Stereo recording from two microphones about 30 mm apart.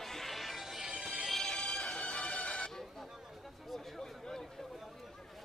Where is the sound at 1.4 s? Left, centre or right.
Left.